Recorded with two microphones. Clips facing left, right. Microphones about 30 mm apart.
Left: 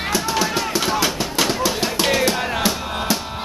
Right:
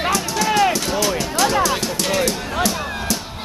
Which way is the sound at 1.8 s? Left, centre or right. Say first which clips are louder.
Left 2 dB; left.